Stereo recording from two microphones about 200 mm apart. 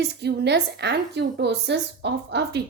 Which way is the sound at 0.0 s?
55° right (ahead or behind).